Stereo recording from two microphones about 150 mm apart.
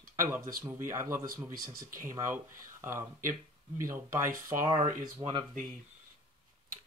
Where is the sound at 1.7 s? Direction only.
70° right (ahead or behind).